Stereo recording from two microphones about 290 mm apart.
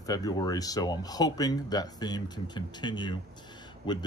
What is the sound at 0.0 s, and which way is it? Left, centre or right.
Speech, centre.